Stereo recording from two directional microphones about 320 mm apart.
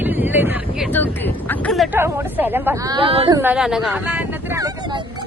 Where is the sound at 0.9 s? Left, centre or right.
Centre.